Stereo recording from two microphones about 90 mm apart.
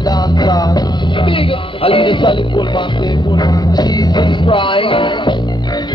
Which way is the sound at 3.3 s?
50° left (ahead or behind).